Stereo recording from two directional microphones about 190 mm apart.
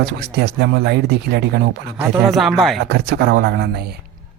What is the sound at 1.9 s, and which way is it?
Speech, 5° right (ahead or behind).